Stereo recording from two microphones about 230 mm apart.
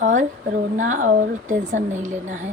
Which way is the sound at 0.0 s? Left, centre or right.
Right.